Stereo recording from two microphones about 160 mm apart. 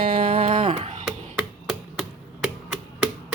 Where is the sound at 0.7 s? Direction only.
45° right (ahead or behind).